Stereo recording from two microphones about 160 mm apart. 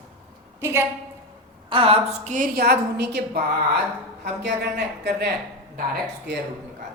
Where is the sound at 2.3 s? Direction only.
65° right (ahead or behind); by 5.3 s 90° right.